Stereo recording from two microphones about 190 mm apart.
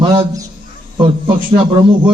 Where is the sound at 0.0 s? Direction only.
20° right (ahead or behind).